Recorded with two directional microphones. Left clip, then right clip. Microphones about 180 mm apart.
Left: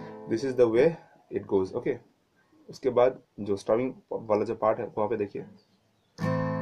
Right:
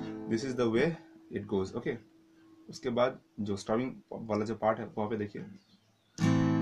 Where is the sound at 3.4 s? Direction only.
30° right (ahead or behind).